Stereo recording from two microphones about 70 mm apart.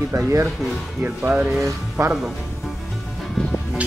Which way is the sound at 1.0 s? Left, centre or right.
Right.